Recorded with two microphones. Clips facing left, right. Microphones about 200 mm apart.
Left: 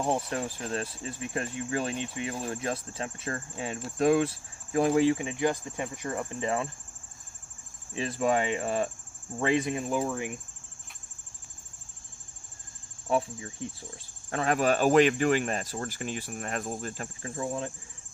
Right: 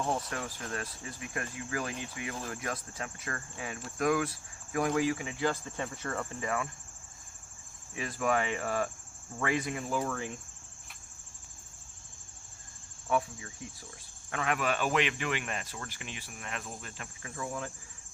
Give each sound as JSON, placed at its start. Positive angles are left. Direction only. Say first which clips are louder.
{"t": 0.0, "sound": "speech", "louder": "left 5 dB", "side_deg": 25}
{"t": 7.9, "sound": "speech", "louder": "left 4 dB", "side_deg": 25}
{"t": 13.1, "sound": "speech", "louder": "left 3 dB", "side_deg": 30}